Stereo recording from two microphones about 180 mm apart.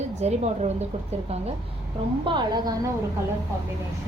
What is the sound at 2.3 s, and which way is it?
Speech, 25° right (ahead or behind).